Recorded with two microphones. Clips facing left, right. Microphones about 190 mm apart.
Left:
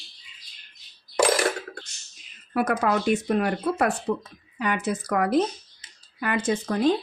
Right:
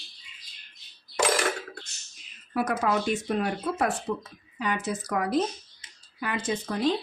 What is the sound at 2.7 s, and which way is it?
A woman's voice, 60° left (ahead or behind).